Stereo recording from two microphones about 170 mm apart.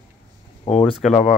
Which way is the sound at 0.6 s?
40° left (ahead or behind).